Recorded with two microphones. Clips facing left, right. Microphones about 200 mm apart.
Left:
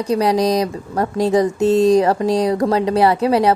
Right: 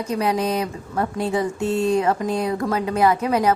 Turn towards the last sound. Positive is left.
turn(degrees=35)  # may be behind; listen again after turning